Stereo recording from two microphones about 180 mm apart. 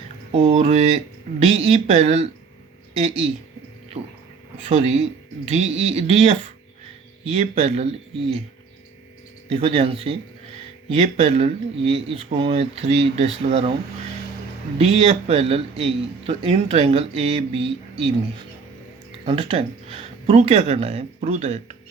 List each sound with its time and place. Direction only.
0.3 s a man's voice: 30° right (ahead or behind)
4.5 s a man's voice: 35° right (ahead or behind)
9.5 s a man's voice: 30° right (ahead or behind)
14.8 s a man's voice: 35° right (ahead or behind)
19.2 s a man's voice: 30° right (ahead or behind)